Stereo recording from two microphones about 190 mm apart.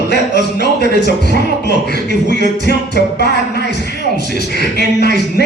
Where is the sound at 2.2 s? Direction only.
60° left (ahead or behind).